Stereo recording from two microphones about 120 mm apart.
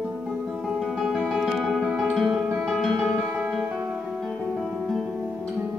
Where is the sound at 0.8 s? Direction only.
Centre (ahead or behind).